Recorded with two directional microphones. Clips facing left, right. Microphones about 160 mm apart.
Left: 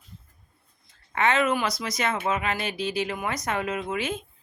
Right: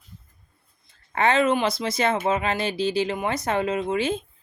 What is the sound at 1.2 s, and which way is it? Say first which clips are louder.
Speech: right 3 dB; 30° right (ahead or behind).